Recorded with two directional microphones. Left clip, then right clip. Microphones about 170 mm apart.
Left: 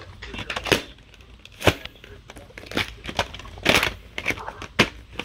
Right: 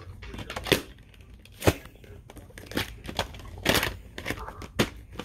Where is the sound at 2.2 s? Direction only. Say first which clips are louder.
Left 6 dB; 10° left (ahead or behind).